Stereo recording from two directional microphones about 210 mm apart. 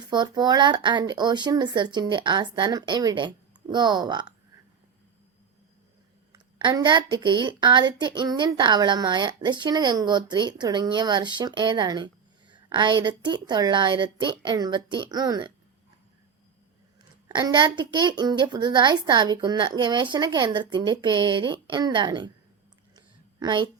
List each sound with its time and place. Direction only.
0.1 s a woman's voice: 20° right (ahead or behind)
6.3 s a woman's voice: 20° right (ahead or behind)
17.3 s a woman's voice: 20° right (ahead or behind)
23.0 s a sound: 20° right (ahead or behind)